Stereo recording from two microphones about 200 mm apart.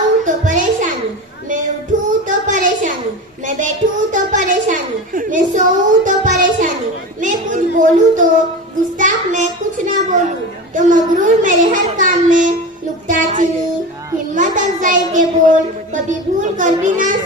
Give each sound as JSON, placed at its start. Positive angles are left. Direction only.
{"t": 0.3, "sound": "music", "side_deg": -40}
{"t": 1.5, "sound": "child singing", "side_deg": -40}
{"t": 3.4, "sound": "a sound", "side_deg": -40}
{"t": 6.1, "sound": "music", "side_deg": -40}
{"t": 7.2, "sound": "child singing", "side_deg": -40}
{"t": 10.8, "sound": "a sound", "side_deg": -40}
{"t": 13.1, "sound": "child singing", "side_deg": -40}